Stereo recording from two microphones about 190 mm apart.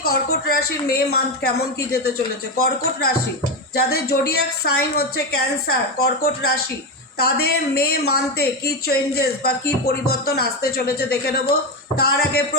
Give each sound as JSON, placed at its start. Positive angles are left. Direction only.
{"t": 0.0, "sound": "a woman's voice", "side_deg": 55}